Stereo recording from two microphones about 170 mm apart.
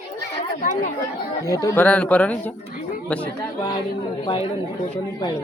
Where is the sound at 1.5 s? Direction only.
20° left (ahead or behind).